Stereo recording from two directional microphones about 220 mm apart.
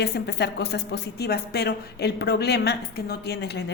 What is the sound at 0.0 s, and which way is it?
A woman's voice, 50° left (ahead or behind).